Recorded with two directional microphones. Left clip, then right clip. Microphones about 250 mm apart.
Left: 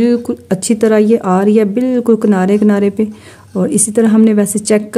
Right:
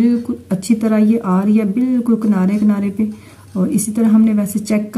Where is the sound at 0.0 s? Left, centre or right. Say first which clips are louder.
Left 4 dB; left.